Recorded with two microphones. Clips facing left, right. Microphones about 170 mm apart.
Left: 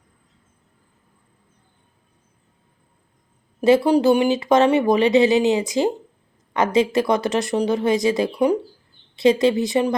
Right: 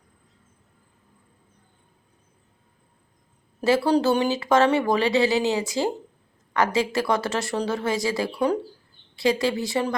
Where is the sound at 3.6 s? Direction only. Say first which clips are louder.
Left 5 dB; 20° left (ahead or behind).